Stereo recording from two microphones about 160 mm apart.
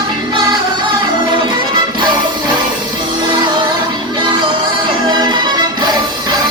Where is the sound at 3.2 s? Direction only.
30° right (ahead or behind).